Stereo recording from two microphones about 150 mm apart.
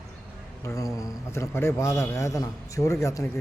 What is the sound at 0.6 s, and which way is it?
A man's voice, 20° left (ahead or behind).